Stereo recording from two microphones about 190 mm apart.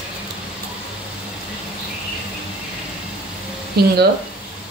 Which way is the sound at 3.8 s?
60° right (ahead or behind).